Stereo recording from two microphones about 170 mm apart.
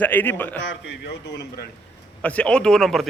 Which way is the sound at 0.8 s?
80° left.